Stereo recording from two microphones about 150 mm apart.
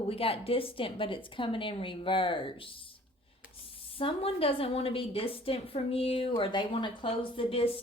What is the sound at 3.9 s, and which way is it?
A woman's voice, 40° left (ahead or behind).